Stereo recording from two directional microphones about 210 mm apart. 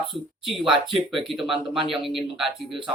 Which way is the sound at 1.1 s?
Centre (ahead or behind).